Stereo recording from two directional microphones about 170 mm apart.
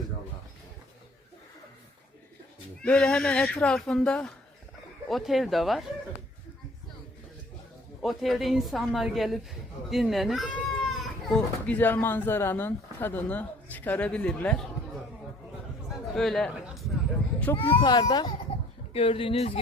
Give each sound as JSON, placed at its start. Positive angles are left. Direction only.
{"t": 2.8, "sound": "speech", "side_deg": 5}
{"t": 8.0, "sound": "speech", "side_deg": 0}
{"t": 16.1, "sound": "speech", "side_deg": 0}
{"t": 17.6, "sound": "a child's voice", "side_deg": 30}